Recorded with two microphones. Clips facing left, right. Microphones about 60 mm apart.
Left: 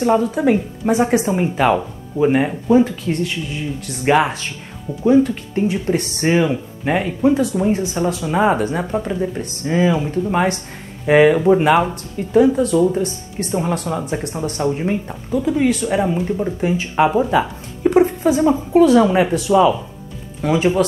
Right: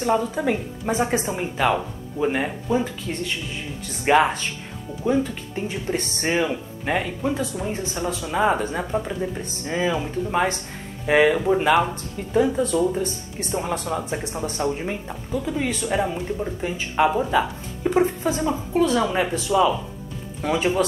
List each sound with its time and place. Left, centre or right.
0.2 s speech: centre
2.8 s speech: centre
5.9 s speech: left
6.2 s speech: centre
8.5 s speech: centre
12.3 s speech: centre
18.0 s a sound: centre
18.4 s speech: centre
20.4 s speech: centre